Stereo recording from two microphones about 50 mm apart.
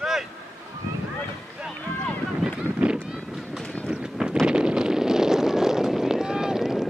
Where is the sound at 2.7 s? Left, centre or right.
Right.